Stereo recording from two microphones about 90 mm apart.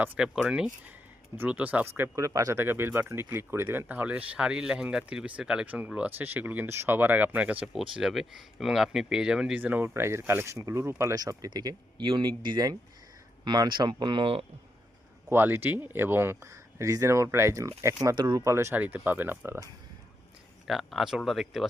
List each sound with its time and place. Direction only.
0.4 s speech: 10° right (ahead or behind)
2.1 s speech: 40° right (ahead or behind)
2.6 s speech: 25° right (ahead or behind)
7.7 s speech: 5° right (ahead or behind)
9.6 s speech: 20° right (ahead or behind)
9.9 s speech: 30° right (ahead or behind)
11.1 s speech: 45° right (ahead or behind); by 14.4 s 80° right
15.3 s speech: 25° right (ahead or behind)
18.1 s speech: 55° right (ahead or behind)
18.4 s speech: 30° right (ahead or behind)
18.8 s speech: 20° right (ahead or behind)
20.7 s speech: 5° right (ahead or behind)